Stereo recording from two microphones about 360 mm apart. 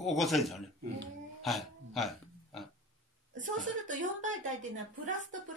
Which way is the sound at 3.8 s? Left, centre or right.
Right.